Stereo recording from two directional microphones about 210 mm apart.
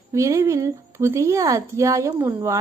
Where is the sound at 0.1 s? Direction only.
15° right (ahead or behind).